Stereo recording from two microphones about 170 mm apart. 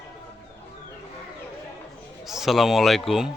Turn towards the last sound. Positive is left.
turn(degrees=0)  # may be behind; listen again after turning